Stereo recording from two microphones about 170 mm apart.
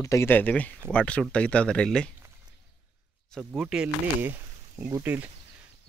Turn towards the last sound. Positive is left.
turn(degrees=-10)  # may be behind; listen again after turning